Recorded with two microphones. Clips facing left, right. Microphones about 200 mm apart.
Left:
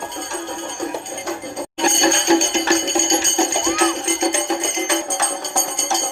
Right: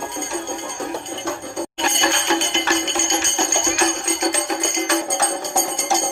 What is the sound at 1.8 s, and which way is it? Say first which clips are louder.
Music: left 6 dB; 15° left (ahead or behind).